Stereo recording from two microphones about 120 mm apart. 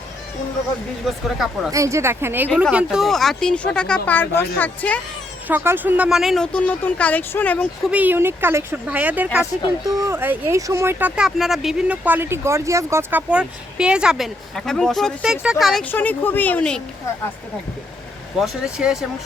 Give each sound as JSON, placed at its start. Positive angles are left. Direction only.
{"t": 1.0, "sound": "speech", "side_deg": -5}
{"t": 1.7, "sound": "speech", "side_deg": -25}
{"t": 2.7, "sound": "speech", "side_deg": -5}
{"t": 5.5, "sound": "speech", "side_deg": -15}
{"t": 7.9, "sound": "speech", "side_deg": -15}
{"t": 9.8, "sound": "speech", "side_deg": -25}
{"t": 11.1, "sound": "speech", "side_deg": -5}
{"t": 12.0, "sound": "speech", "side_deg": -15}
{"t": 14.5, "sound": "speech", "side_deg": 5}
{"t": 15.8, "sound": "speech", "side_deg": 15}
{"t": 18.3, "sound": "speech", "side_deg": -5}